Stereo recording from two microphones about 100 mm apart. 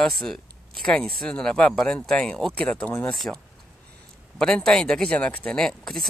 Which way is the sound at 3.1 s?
Centre (ahead or behind).